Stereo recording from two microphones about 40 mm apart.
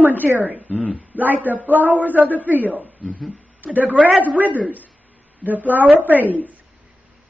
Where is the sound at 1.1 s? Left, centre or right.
Right.